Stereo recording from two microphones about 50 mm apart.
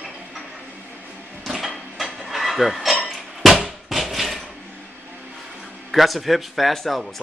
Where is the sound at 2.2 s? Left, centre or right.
Centre.